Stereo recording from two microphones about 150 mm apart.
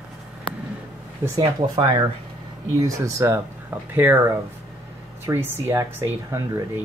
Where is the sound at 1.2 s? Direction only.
25° right (ahead or behind).